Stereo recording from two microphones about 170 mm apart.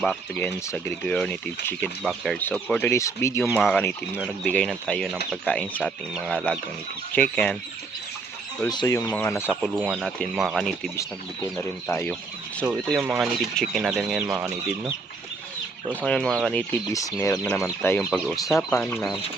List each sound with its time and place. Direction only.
0.0 s speech: 5° left (ahead or behind)
3.5 s speech: centre (ahead or behind)
8.6 s speech: 20° left (ahead or behind)
9.0 s speech: 10° left (ahead or behind)
11.9 s speech: 10° left (ahead or behind)
12.6 s speech: 5° right (ahead or behind)
16.0 s speech: 5° left (ahead or behind)
16.9 s speech: 20° left (ahead or behind)